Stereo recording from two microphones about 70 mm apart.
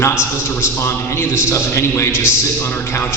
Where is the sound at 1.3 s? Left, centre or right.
Left.